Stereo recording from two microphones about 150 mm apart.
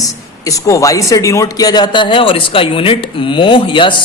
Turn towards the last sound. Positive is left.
turn(degrees=35)  # may be behind; listen again after turning